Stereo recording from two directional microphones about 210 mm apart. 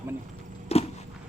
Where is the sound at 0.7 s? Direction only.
30° left (ahead or behind).